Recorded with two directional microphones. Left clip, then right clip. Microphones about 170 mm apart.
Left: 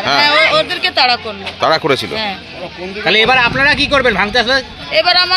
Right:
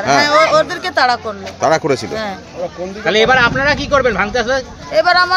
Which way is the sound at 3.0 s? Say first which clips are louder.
Left 1 dB; 50° left (ahead or behind).